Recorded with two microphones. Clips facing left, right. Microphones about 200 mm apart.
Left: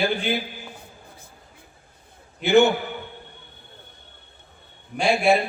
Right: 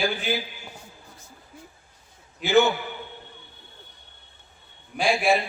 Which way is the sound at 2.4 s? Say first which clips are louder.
Left 3 dB; 60° left (ahead or behind).